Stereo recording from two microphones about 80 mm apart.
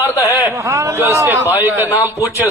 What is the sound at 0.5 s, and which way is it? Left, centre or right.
A man's voice, right.